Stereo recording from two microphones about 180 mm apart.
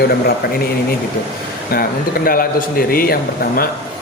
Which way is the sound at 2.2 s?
55° left (ahead or behind).